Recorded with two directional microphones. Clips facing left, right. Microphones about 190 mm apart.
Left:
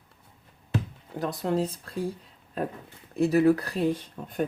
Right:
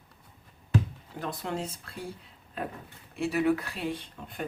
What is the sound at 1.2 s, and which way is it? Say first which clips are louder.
Speech: left 7 dB; 35° left (ahead or behind).